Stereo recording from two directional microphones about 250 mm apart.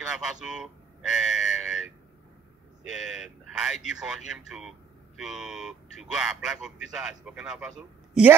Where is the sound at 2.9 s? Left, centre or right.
Centre.